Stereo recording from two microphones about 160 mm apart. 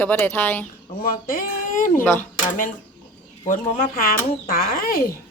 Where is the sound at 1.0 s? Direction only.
65° left (ahead or behind).